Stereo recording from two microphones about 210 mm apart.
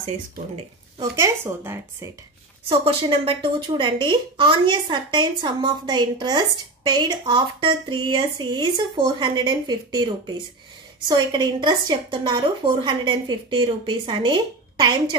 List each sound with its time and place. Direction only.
1.1 s speech: 15° right (ahead or behind)
2.7 s a woman's voice: 25° right (ahead or behind)